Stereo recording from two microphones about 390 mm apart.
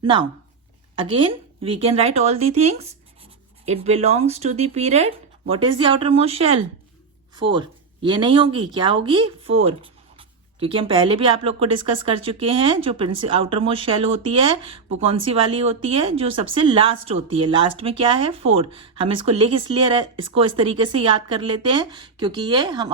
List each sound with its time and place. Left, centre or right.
0.0 s speech: centre